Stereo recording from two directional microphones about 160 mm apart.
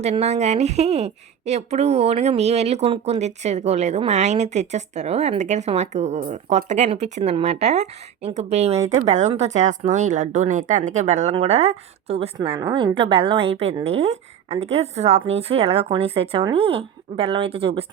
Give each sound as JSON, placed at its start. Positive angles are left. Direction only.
{"t": 0.0, "sound": "a woman's voice", "side_deg": -45}